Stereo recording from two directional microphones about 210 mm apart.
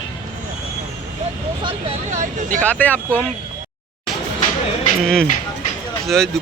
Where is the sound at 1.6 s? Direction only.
30° right (ahead or behind).